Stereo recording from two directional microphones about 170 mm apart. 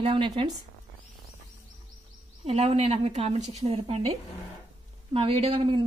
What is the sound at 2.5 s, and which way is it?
A woman's voice, 35° right (ahead or behind).